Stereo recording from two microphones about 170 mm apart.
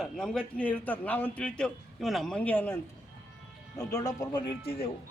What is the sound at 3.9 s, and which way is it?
Speech, 20° left (ahead or behind).